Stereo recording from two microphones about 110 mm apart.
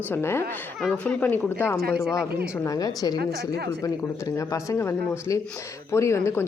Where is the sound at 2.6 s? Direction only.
35° left (ahead or behind).